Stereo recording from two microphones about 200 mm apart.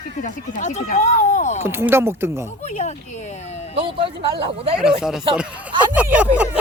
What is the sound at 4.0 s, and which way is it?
Speech, 25° right (ahead or behind).